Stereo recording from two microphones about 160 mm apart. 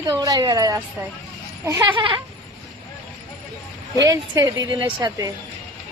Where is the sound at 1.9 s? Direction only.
30° right (ahead or behind).